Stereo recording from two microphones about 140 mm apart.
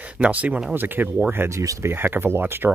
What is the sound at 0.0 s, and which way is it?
Speech, 10° right (ahead or behind).